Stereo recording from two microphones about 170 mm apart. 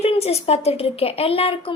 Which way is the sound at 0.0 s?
35° left (ahead or behind).